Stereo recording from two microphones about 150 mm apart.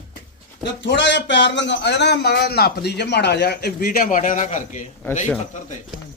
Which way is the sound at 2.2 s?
90° left.